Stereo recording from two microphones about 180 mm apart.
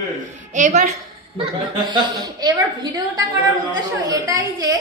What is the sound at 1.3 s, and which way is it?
A woman's voice, 30° right (ahead or behind).